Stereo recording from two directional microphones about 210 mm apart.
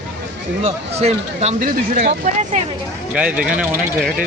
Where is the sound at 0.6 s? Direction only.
30° right (ahead or behind).